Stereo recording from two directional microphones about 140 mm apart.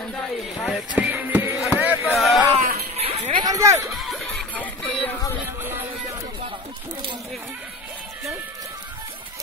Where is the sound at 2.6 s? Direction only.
85° right.